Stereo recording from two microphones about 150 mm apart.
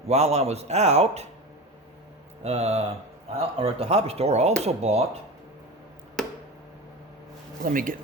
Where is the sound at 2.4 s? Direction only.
45° right (ahead or behind).